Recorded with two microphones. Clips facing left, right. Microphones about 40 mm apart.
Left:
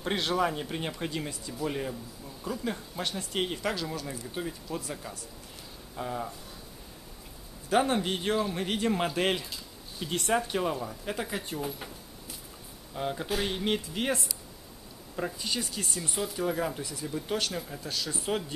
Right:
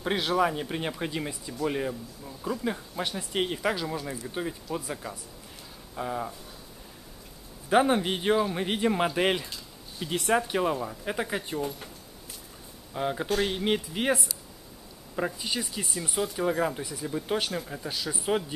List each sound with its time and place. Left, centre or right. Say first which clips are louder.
0.0 s speech: right 3 dB; centre
7.7 s speech: right 3 dB; centre
11.6 s a sound: right 2 dB; centre
12.9 s speech: right 3 dB; centre
13.3 s speech: right 3 dB; centre